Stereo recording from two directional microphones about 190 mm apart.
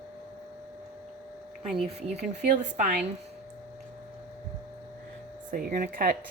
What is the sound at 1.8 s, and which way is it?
Speech, 35° right (ahead or behind).